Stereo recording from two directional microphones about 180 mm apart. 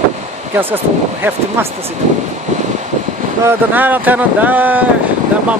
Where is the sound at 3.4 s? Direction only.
10° right (ahead or behind).